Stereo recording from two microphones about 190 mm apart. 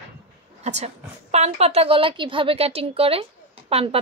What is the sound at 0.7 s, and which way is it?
A woman's voice, 35° right (ahead or behind).